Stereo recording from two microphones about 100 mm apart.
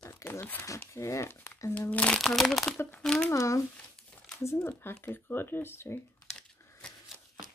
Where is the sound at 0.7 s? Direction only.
30° left (ahead or behind).